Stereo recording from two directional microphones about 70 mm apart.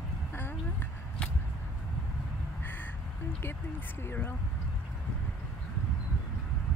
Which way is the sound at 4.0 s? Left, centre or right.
Left.